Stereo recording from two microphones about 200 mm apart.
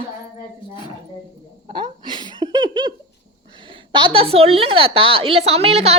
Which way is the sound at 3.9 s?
25° right (ahead or behind).